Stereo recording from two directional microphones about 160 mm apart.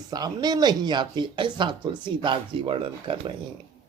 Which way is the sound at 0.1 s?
25° right (ahead or behind).